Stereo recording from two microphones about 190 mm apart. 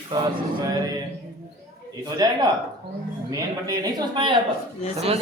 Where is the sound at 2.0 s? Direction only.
20° right (ahead or behind).